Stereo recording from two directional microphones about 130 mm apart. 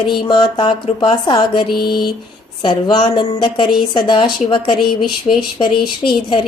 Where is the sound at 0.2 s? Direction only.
40° left (ahead or behind).